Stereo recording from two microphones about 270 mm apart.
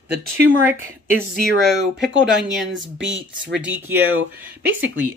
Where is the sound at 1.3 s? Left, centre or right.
Right.